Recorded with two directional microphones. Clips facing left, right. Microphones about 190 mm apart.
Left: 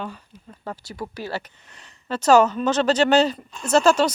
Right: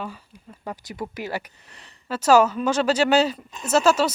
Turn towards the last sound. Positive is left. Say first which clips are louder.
# left 2 dB
turn(degrees=-5)  # may be behind; listen again after turning